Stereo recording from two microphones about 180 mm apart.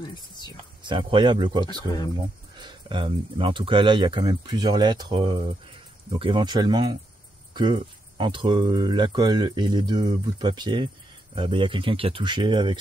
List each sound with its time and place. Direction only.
0.0 s speech: 25° left (ahead or behind)
0.8 s speech: 25° right (ahead or behind)